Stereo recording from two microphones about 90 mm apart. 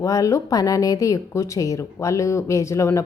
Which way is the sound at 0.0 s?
35° left (ahead or behind).